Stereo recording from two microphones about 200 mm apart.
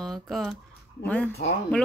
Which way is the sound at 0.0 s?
Centre (ahead or behind).